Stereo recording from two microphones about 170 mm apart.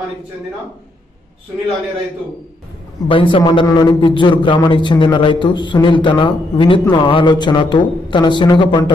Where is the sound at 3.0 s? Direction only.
30° left (ahead or behind).